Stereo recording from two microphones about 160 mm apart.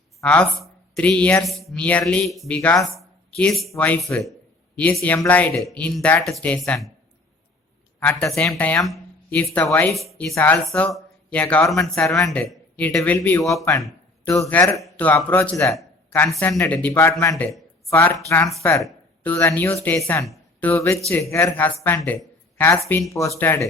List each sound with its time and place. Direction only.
0.2 s speech: 5° left (ahead or behind)
3.0 s a sound: 5° left (ahead or behind)
3.8 s speech: 10° left (ahead or behind)
7.9 s speech: 10° left (ahead or behind)
9.9 s speech: centre (ahead or behind)
10.3 s speech: 15° left (ahead or behind)
15.7 s a sound: centre (ahead or behind)
16.5 s speech: 15° left (ahead or behind)